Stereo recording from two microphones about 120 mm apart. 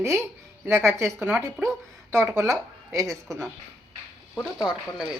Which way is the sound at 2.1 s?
25° right (ahead or behind).